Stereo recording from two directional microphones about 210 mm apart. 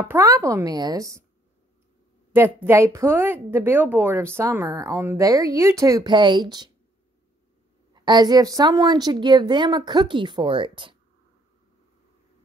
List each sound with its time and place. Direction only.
0.1 s a woman's voice: 15° right (ahead or behind)
2.3 s a woman's voice: 10° right (ahead or behind)
7.9 s a woman's voice: 20° right (ahead or behind)